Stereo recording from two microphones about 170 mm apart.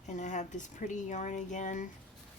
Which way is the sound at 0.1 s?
45° left (ahead or behind).